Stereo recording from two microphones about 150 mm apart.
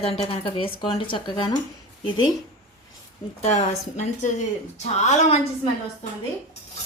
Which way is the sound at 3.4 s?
50° left (ahead or behind).